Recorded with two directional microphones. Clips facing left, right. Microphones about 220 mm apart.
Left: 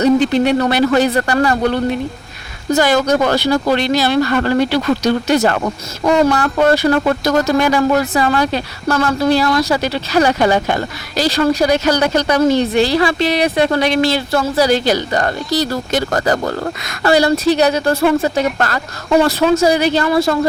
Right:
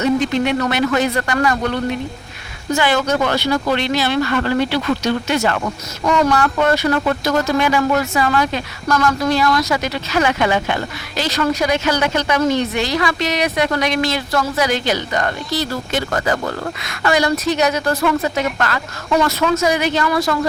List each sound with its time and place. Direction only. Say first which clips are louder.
0.0 s a woman's voice: left 5 dB; 35° left (ahead or behind)